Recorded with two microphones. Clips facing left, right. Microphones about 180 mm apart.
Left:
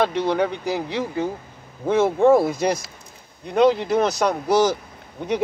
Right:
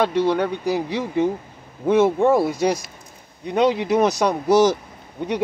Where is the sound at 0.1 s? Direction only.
10° right (ahead or behind).